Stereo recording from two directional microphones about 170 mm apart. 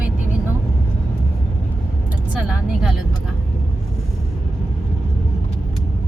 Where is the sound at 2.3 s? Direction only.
Centre (ahead or behind).